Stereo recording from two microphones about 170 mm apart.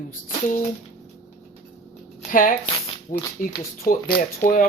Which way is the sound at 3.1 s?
25° left (ahead or behind).